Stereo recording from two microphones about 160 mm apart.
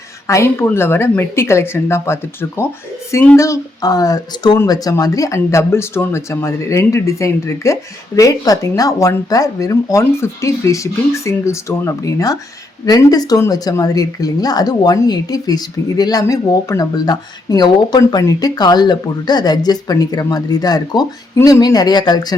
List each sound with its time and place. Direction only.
0.3 s a woman's voice: 15° left (ahead or behind)